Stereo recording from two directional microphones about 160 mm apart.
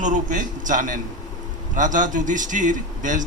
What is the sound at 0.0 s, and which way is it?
A man's voice, 55° right (ahead or behind).